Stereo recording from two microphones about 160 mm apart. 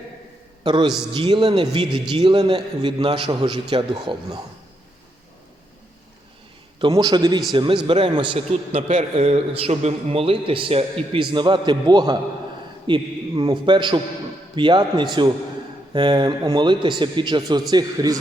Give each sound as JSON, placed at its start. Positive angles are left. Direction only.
{"t": 0.6, "sound": "a man's voice", "side_deg": -30}
{"t": 6.7, "sound": "a man's voice", "side_deg": -25}
{"t": 8.9, "sound": "a man's voice", "side_deg": -45}